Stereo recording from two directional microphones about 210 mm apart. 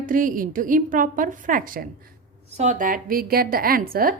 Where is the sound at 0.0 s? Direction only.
40° right (ahead or behind).